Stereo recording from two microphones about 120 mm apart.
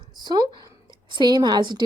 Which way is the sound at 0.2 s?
35° right (ahead or behind).